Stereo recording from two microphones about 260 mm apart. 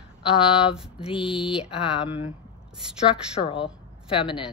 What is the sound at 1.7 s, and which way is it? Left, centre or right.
Speech, left.